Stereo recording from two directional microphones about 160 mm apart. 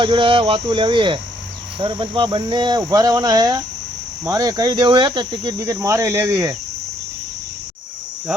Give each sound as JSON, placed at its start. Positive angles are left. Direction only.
{"t": 0.0, "sound": "speech", "side_deg": -30}
{"t": 8.3, "sound": "cricket", "side_deg": -5}